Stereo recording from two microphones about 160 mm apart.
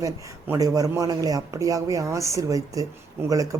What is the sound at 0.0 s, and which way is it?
A woman's voice, 20° right (ahead or behind).